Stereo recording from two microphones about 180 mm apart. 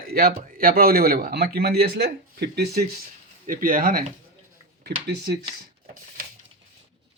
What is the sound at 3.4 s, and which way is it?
Speech, 50° right (ahead or behind).